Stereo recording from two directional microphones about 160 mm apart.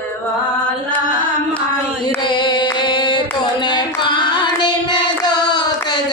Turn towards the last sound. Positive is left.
turn(degrees=25)  # may be behind; listen again after turning